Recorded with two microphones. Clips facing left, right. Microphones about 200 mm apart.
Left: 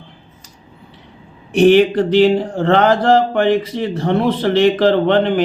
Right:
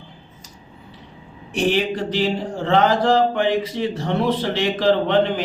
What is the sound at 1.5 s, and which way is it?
Speech, 65° left (ahead or behind).